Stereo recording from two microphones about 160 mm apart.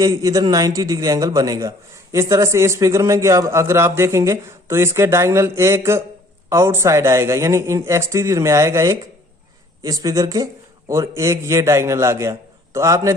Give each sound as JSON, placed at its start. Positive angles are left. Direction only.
{"t": 0.0, "sound": "a man's voice", "side_deg": -20}